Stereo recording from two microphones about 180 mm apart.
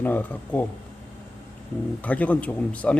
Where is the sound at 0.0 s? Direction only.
10° left (ahead or behind).